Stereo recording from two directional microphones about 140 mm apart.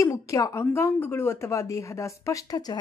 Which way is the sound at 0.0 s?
20° left (ahead or behind).